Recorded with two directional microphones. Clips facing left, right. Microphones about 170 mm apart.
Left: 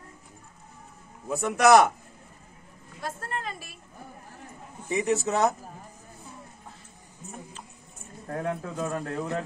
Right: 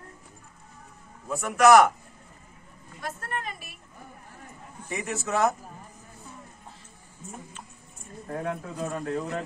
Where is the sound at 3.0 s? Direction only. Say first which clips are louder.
Even; 30° left (ahead or behind).